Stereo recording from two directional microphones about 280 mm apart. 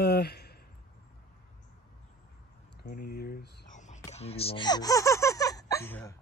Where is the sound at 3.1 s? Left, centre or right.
Left; by 6.1 s centre.